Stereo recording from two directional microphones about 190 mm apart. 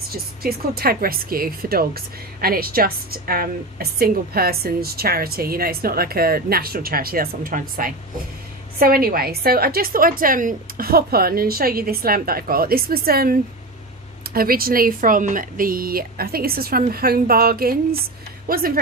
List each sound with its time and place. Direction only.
0.1 s speech: 55° right (ahead or behind)